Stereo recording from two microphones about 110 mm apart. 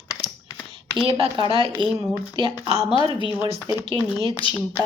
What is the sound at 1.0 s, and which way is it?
A woman's voice, 50° right (ahead or behind).